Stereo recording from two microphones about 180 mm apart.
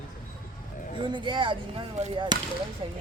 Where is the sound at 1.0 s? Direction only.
25° right (ahead or behind).